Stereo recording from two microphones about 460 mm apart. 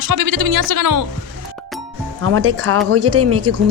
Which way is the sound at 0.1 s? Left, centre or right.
Right.